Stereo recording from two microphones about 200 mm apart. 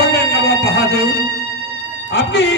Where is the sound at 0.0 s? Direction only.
50° left (ahead or behind).